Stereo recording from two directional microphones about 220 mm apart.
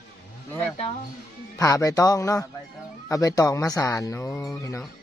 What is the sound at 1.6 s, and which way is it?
Speech, 15° left (ahead or behind).